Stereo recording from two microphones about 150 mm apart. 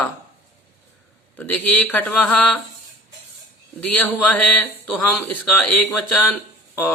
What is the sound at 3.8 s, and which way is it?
Speech, 10° left (ahead or behind).